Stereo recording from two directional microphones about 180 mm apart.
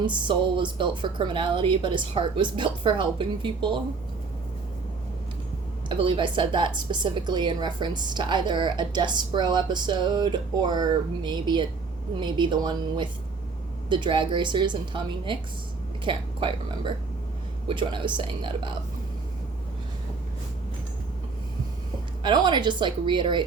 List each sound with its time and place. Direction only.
0.0 s a woman's voice: 25° right (ahead or behind)
6.0 s a woman's voice: 25° right (ahead or behind)
22.2 s a woman's voice: 25° right (ahead or behind)